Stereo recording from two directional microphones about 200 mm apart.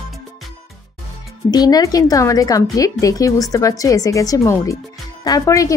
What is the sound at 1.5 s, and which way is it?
Speech, 20° left (ahead or behind).